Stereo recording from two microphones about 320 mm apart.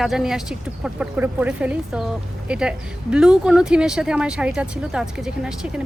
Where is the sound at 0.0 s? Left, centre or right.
Centre.